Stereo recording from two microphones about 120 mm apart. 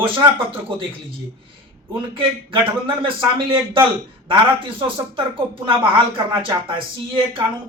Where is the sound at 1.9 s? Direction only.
45° right (ahead or behind).